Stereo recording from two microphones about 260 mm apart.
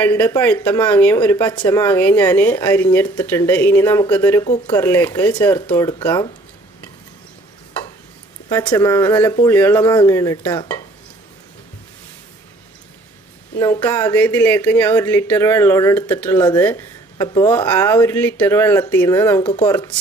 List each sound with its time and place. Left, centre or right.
0.0 s speech: centre
4.4 s speech: left
4.7 s speech: centre
8.4 s speech: centre
13.6 s speech: centre
19.4 s speech: left
19.6 s speech: centre